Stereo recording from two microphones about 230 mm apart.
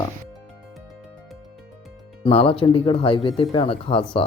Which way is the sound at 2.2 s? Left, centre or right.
Left.